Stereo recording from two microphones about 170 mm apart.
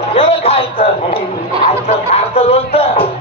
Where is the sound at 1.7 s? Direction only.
40° left (ahead or behind).